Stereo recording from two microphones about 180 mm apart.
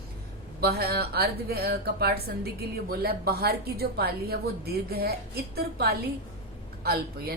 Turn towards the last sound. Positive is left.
turn(degrees=-60)  # may be behind; listen again after turning